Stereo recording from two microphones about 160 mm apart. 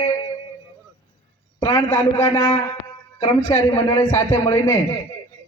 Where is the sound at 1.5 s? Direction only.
20° left (ahead or behind).